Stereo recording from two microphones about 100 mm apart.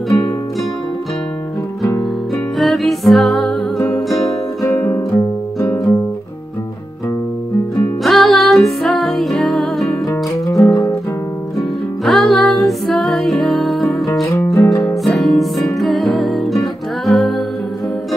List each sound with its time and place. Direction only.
2.6 s music: centre (ahead or behind)
4.1 s music: 35° left (ahead or behind)
8.0 s music: centre (ahead or behind)
10.6 s music: 40° left (ahead or behind)
12.0 s music: 5° left (ahead or behind)
14.5 s music: 30° left (ahead or behind)
15.0 s music: centre (ahead or behind)